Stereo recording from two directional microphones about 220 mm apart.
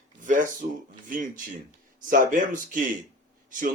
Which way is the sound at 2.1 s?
35° right (ahead or behind).